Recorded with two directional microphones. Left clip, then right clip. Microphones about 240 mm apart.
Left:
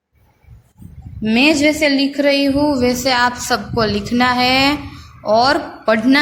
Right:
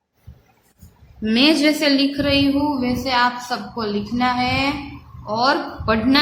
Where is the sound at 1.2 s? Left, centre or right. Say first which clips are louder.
Left 3 dB; centre.